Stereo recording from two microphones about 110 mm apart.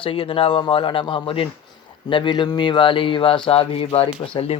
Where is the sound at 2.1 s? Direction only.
45° left (ahead or behind); by 4.6 s 60° left (ahead or behind).